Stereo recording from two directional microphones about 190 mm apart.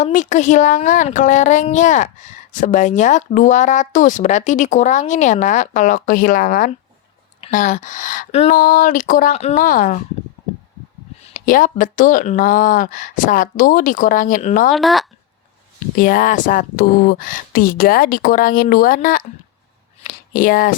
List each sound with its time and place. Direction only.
0.0 s a woman's voice: 40° left (ahead or behind)
8.5 s speech: 45° left (ahead or behind)
9.6 s speech: 45° left (ahead or behind)
11.3 s speech: 45° left (ahead or behind)
14.7 s speech: centre (ahead or behind)
16.0 s speech: 45° left (ahead or behind)
20.1 s a sound: 45° left (ahead or behind)